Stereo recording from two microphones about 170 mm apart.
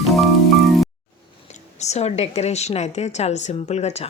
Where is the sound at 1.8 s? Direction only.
40° left (ahead or behind).